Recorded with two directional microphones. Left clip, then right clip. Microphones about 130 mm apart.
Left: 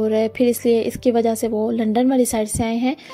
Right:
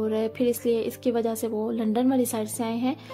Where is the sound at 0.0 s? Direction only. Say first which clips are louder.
Left 7 dB; 35° left (ahead or behind).